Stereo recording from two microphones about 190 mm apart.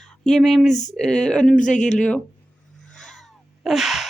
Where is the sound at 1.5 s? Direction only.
40° left (ahead or behind).